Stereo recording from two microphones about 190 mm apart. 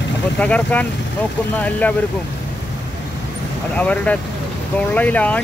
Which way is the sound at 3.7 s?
5° left (ahead or behind).